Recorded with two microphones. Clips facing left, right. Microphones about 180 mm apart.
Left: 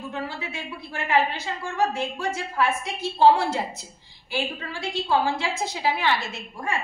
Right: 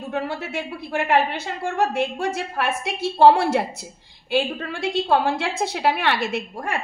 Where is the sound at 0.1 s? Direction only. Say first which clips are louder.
Right 10 dB; 65° right (ahead or behind).